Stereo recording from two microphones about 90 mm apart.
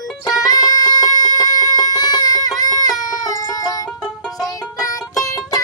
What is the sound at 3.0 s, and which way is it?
Music, 45° left (ahead or behind).